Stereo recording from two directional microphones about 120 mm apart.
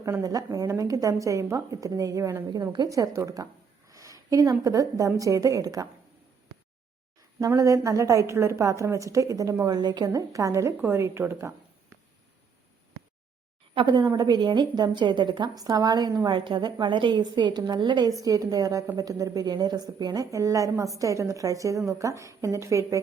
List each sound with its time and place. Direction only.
0.0 s a woman's voice: 30° right (ahead or behind)
7.4 s a woman's voice: 25° right (ahead or behind)
13.7 s a woman's voice: 35° right (ahead or behind)